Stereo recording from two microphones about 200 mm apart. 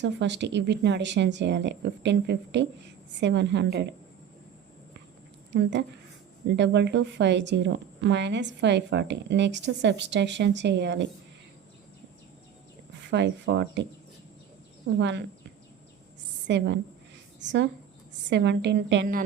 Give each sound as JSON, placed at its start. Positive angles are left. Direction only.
{"t": 0.0, "sound": "a woman's voice", "side_deg": -60}
{"t": 6.6, "sound": "a woman's voice", "side_deg": -60}
{"t": 13.1, "sound": "a woman's voice", "side_deg": -60}
{"t": 14.9, "sound": "a woman's voice", "side_deg": -60}
{"t": 16.5, "sound": "a woman's voice", "side_deg": -60}